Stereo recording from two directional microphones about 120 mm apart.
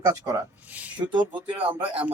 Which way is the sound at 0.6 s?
10° right (ahead or behind).